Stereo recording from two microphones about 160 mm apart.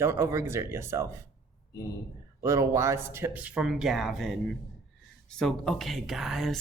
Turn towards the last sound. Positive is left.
turn(degrees=0)  # may be behind; listen again after turning